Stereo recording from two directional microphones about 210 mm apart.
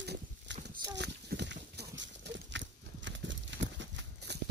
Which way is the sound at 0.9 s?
55° right (ahead or behind).